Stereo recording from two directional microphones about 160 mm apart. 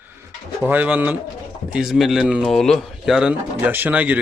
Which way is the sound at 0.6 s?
10° right (ahead or behind).